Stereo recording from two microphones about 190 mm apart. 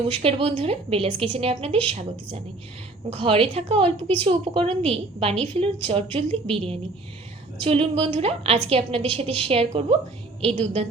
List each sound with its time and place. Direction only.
0.1 s a woman's voice: 30° right (ahead or behind)